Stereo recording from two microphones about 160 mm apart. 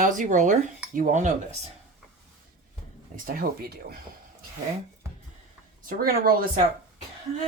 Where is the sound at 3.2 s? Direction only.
70° right (ahead or behind).